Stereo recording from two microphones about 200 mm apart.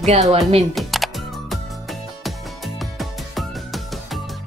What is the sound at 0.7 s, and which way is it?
Music, centre (ahead or behind).